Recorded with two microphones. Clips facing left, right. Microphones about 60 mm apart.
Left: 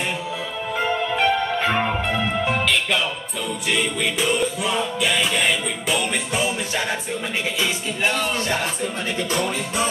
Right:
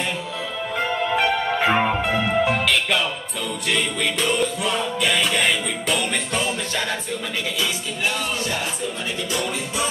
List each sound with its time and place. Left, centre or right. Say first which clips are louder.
0.7 s music: even; centre
7.6 s music: left 3 dB; left